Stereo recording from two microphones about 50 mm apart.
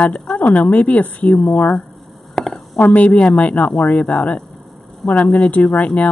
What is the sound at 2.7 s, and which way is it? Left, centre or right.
A woman's voice, left.